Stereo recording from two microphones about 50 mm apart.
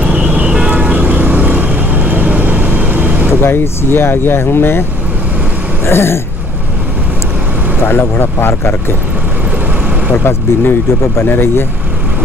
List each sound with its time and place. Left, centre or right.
0.5 s vehicle: right
3.4 s speech: left
5.9 s speech: left
7.8 s speech: left
10.2 s speech: left